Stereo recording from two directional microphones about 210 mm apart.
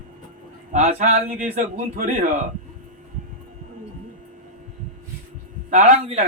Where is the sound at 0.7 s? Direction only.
30° right (ahead or behind).